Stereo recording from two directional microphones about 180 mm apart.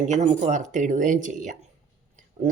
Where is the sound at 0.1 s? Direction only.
40° right (ahead or behind).